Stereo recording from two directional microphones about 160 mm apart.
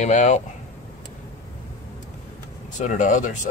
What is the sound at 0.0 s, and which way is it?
Speech, 50° left (ahead or behind).